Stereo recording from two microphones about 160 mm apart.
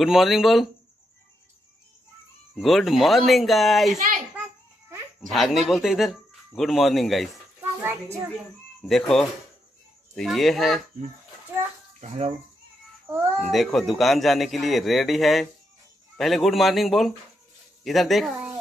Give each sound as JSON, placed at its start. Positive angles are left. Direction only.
{"t": 0.0, "sound": "a man's voice", "side_deg": 0}
{"t": 2.5, "sound": "a man's voice", "side_deg": 0}
{"t": 4.4, "sound": "babbling", "side_deg": -10}
{"t": 5.2, "sound": "a man's voice", "side_deg": 0}
{"t": 7.8, "sound": "a child's voice", "side_deg": -15}
{"t": 8.8, "sound": "a man's voice", "side_deg": 0}
{"t": 12.0, "sound": "speech", "side_deg": -40}
{"t": 13.4, "sound": "a man's voice", "side_deg": 0}